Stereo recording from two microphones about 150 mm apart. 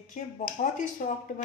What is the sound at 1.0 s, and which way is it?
Speech, 60° left (ahead or behind).